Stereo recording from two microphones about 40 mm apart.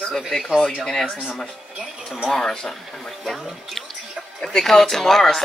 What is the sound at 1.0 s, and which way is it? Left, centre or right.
Speech, left.